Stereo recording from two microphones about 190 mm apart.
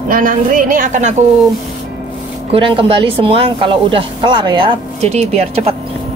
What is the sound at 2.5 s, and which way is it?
Speech, 30° right (ahead or behind).